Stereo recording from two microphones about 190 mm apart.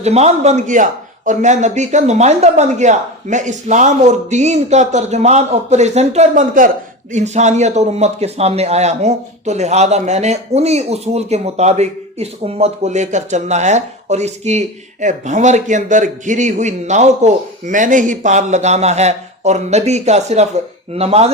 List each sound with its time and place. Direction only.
0.0 s a man's voice: 35° right (ahead or behind)